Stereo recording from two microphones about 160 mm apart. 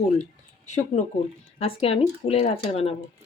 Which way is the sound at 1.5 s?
35° left (ahead or behind).